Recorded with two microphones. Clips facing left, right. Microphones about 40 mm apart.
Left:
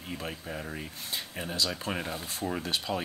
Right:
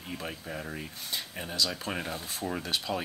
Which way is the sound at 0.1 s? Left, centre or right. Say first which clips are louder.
Even; centre.